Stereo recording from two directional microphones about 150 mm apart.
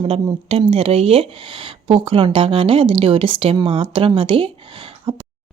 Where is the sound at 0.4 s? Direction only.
40° right (ahead or behind).